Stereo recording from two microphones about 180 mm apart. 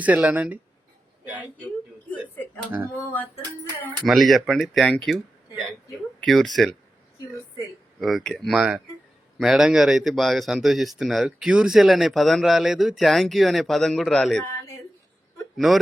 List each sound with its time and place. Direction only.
0.0 s a man's voice: 5° right (ahead or behind)
3.0 s music: 15° left (ahead or behind)
4.0 s speech: centre (ahead or behind)
8.0 s speech: centre (ahead or behind)
14.5 s a sound: 15° left (ahead or behind)
15.5 s speech: centre (ahead or behind)